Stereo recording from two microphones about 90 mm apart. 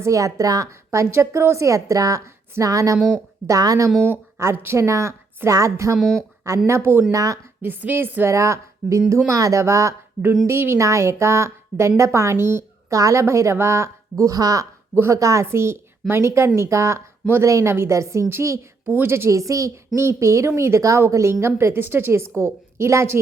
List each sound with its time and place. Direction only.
0.0 s a woman's voice: 35° right (ahead or behind)
4.1 s a woman's voice: 30° right (ahead or behind)
6.0 s speech: 5° left (ahead or behind)
6.7 s a woman's voice: 30° right (ahead or behind)
7.6 s a woman's voice: 20° right (ahead or behind); by 14.7 s 40° right (ahead or behind)
14.9 s a woman's voice: 30° right (ahead or behind)